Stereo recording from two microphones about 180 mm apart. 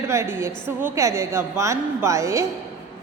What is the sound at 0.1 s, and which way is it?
A woman's voice, 15° right (ahead or behind).